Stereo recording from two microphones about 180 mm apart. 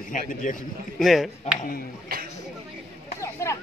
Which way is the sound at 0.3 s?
45° left (ahead or behind).